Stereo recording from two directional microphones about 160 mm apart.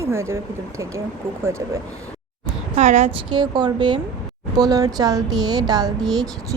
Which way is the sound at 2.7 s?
45° right (ahead or behind).